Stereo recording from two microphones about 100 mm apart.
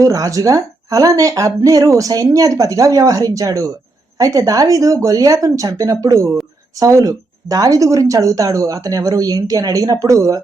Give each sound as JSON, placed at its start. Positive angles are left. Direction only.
{"t": 0.0, "sound": "a woman's voice", "side_deg": -35}